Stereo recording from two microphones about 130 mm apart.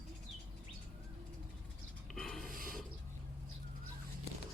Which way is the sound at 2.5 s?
90° right.